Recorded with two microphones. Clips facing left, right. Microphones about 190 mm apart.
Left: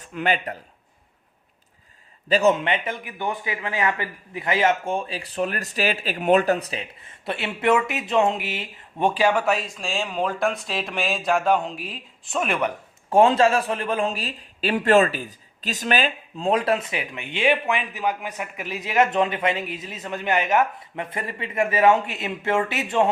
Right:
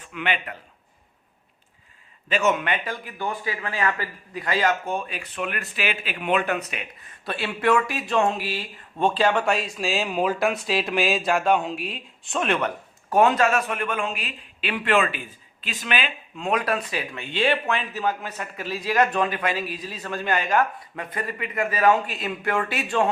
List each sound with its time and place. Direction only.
0.0 s a man's voice: 40° left (ahead or behind)
2.3 s speech: 30° left (ahead or behind); by 12.7 s 10° left (ahead or behind)
13.1 s speech: 30° left (ahead or behind)